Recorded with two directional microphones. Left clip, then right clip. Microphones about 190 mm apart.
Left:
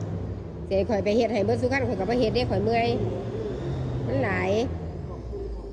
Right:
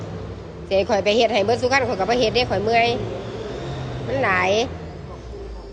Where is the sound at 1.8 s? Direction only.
40° left (ahead or behind).